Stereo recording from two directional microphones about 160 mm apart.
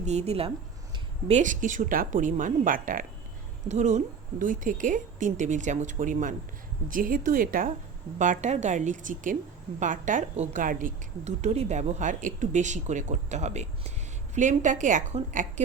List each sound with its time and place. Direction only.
0.0 s a woman's voice: 45° right (ahead or behind)
1.3 s speech: 50° right (ahead or behind)
3.7 s a woman's voice: 45° right (ahead or behind)
8.2 s a woman's voice: 50° right (ahead or behind)